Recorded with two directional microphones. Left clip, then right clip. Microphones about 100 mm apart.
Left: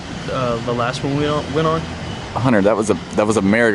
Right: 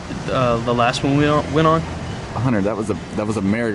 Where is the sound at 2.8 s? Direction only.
25° left (ahead or behind).